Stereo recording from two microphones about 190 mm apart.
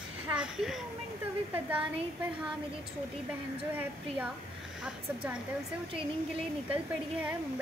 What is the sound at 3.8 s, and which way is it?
Speech, 5° right (ahead or behind).